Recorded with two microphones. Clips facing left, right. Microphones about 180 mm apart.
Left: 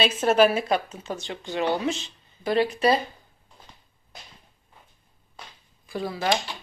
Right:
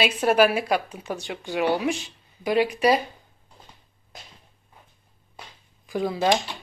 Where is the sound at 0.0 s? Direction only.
10° right (ahead or behind).